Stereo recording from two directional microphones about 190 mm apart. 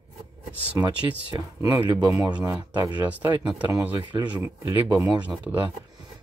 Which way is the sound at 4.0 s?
25° right (ahead or behind).